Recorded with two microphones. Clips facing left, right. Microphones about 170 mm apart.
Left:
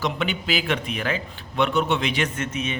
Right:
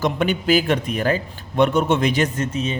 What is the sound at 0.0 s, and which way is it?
A man's voice, 45° right (ahead or behind).